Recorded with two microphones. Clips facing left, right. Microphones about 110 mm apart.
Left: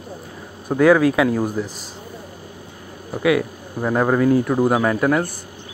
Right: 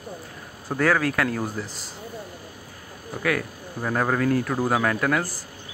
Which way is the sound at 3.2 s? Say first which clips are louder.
Left 8 dB; 15° left (ahead or behind).